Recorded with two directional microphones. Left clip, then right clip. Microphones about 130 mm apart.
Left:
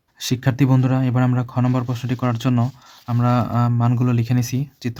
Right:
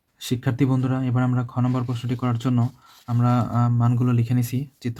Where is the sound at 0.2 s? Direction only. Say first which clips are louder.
Left 3 dB; 35° left (ahead or behind).